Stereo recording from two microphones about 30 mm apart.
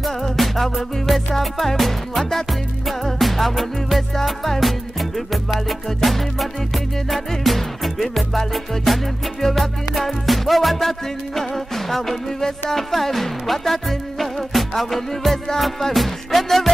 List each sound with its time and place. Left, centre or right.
0.0 s music: centre
12.4 s music: centre
12.7 s music: centre